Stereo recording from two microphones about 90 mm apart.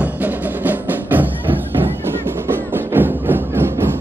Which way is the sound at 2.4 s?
25° right (ahead or behind).